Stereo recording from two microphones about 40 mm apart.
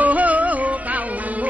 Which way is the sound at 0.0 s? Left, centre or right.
Right.